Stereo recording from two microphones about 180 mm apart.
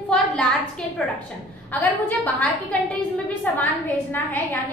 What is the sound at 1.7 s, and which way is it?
A woman's voice, 10° left (ahead or behind).